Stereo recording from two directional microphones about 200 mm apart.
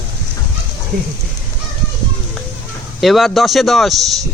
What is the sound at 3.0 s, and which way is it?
Speech, centre (ahead or behind).